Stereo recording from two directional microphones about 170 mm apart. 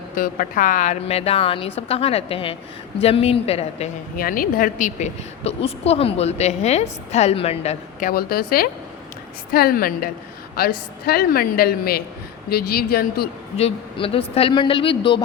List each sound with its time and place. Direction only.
0.2 s a woman's voice: 55° left (ahead or behind); by 3.9 s 40° left (ahead or behind)
4.2 s a woman's voice: 55° left (ahead or behind); by 8.1 s 40° left (ahead or behind)
8.1 s a woman's voice: 65° left (ahead or behind)
13.6 s a woman's voice: 35° left (ahead or behind)